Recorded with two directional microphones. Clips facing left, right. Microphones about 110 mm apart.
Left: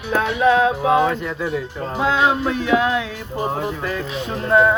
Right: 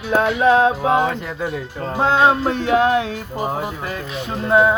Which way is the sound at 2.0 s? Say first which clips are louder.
Right 3 dB; 30° right (ahead or behind).